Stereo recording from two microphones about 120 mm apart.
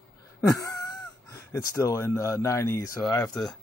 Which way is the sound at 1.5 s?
25° left (ahead or behind).